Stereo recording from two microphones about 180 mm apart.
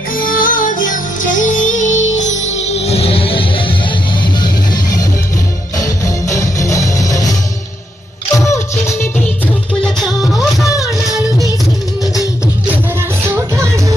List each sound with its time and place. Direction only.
0.1 s music: 50° left (ahead or behind); by 7.3 s 20° left (ahead or behind)
8.4 s music: 15° left (ahead or behind)
9.8 s music: centre (ahead or behind)
12.0 s music: 20° left (ahead or behind)
13.0 s music: 15° right (ahead or behind)